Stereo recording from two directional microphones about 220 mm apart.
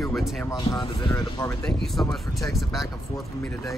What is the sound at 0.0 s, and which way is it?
Speech, centre (ahead or behind).